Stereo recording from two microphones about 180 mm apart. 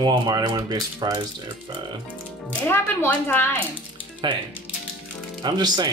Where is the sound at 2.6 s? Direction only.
10° left (ahead or behind).